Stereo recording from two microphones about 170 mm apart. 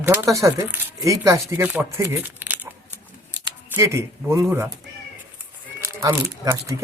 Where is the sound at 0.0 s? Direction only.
15° right (ahead or behind).